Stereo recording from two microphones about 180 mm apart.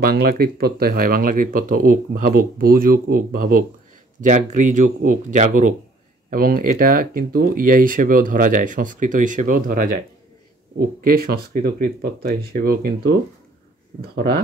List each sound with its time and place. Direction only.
0.0 s speech: 60° right (ahead or behind)
14.1 s speech: 55° right (ahead or behind)